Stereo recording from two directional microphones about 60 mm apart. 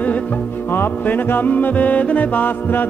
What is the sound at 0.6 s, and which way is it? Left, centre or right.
Music, left.